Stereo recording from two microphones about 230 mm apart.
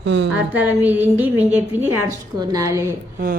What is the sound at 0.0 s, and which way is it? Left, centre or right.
Speech, right.